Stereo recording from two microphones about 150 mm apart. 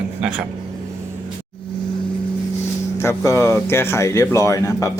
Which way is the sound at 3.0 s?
20° left (ahead or behind).